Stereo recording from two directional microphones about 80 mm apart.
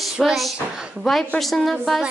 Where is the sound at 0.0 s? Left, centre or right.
Centre.